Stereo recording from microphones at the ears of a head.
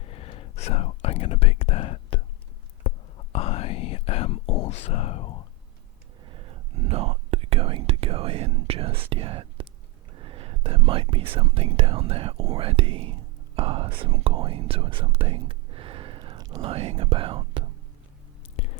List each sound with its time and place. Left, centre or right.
0.0 s whispering: left
6.2 s whispering: right
10.2 s speech: right